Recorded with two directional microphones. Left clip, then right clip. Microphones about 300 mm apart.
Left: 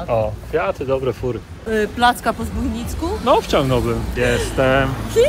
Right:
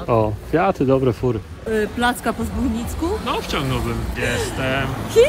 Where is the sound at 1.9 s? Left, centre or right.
Centre.